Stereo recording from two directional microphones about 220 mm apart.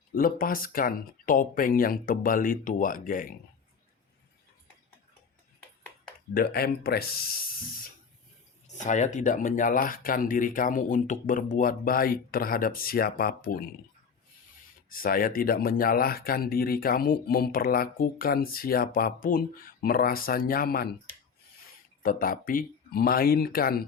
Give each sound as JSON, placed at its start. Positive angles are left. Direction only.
{"t": 0.1, "sound": "speech", "side_deg": 40}
{"t": 6.3, "sound": "speech", "side_deg": 45}
{"t": 8.6, "sound": "speech", "side_deg": 35}
{"t": 14.8, "sound": "speech", "side_deg": 40}
{"t": 22.0, "sound": "speech", "side_deg": 40}